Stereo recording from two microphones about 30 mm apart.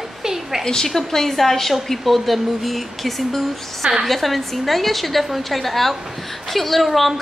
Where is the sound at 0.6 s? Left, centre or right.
Centre.